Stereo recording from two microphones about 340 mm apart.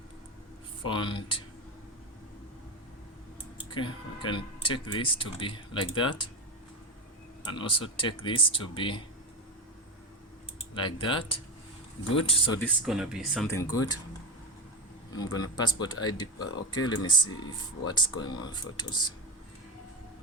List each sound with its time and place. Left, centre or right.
0.9 s speech: centre
3.7 s speech: centre
7.5 s speech: centre
10.8 s speech: centre
12.5 s speech: centre
15.1 s speech: centre